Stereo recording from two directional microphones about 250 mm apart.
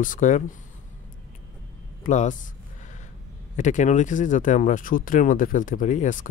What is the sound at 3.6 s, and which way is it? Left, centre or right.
Speech, left.